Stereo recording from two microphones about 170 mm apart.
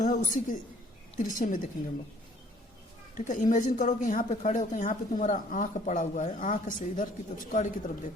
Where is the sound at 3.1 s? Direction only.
50° left (ahead or behind).